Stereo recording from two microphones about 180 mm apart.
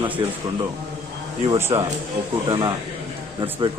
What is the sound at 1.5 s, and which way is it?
A man's voice, 15° right (ahead or behind).